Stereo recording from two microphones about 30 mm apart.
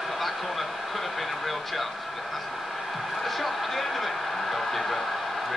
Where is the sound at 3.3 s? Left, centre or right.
Centre.